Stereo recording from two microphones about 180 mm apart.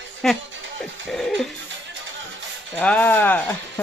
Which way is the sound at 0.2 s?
Centre (ahead or behind).